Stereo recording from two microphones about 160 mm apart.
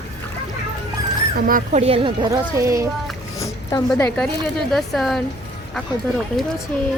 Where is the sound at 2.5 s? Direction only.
20° right (ahead or behind).